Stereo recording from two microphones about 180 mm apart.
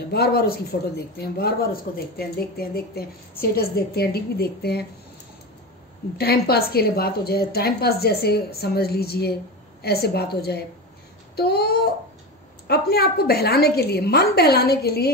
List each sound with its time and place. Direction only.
0.1 s a woman's voice: 60° left (ahead or behind)
6.1 s a woman's voice: 60° left (ahead or behind)